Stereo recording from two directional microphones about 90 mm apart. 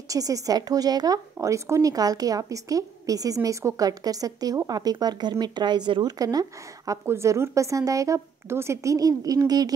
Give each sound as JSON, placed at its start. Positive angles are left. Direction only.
{"t": 0.1, "sound": "a woman's voice", "side_deg": -40}
{"t": 6.1, "sound": "a woman's voice", "side_deg": -45}
{"t": 6.9, "sound": "a woman's voice", "side_deg": -35}